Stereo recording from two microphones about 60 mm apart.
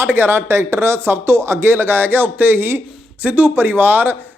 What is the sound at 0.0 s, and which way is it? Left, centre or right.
Speech, right.